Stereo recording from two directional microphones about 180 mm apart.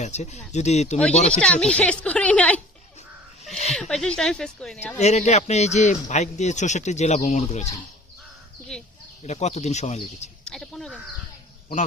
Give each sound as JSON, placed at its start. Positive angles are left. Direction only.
{"t": 0.0, "sound": "speech", "side_deg": 40}
{"t": 1.3, "sound": "a woman's voice", "side_deg": 5}
{"t": 3.4, "sound": "speech", "side_deg": 40}
{"t": 3.8, "sound": "speech", "side_deg": 5}
{"t": 4.9, "sound": "speech", "side_deg": 40}
{"t": 8.7, "sound": "speech", "side_deg": 5}
{"t": 9.2, "sound": "speech", "side_deg": 40}
{"t": 10.4, "sound": "chicken", "side_deg": 5}